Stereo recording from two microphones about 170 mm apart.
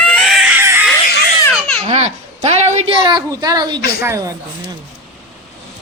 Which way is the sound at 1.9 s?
40° right (ahead or behind).